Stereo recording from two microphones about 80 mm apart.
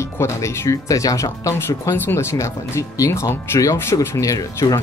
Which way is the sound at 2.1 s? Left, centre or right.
Left.